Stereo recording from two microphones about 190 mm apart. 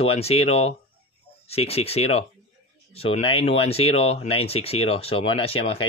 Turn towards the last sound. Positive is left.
turn(degrees=30)  # may be behind; listen again after turning